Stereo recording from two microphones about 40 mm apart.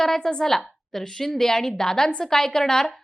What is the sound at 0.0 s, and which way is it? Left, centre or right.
A woman's voice, centre.